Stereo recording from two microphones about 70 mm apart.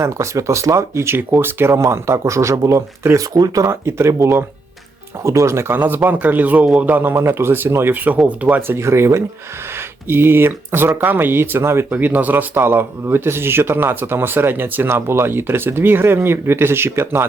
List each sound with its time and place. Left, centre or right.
0.0 s speech: right
3.3 s speech: right
3.7 s speech: right
7.1 s speech: right
8.6 s speech: right